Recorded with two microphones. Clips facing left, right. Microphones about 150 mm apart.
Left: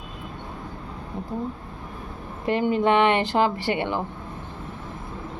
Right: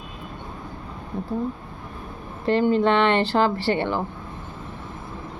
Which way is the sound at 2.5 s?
15° left (ahead or behind).